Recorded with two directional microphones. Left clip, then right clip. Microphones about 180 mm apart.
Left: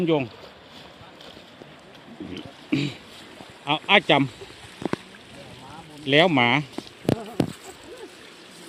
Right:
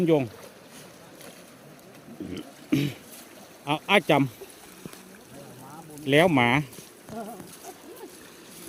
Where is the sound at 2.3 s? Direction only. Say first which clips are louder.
Left 1 dB; 20° right (ahead or behind).